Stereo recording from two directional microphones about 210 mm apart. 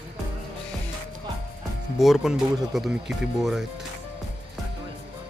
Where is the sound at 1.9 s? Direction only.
Centre (ahead or behind).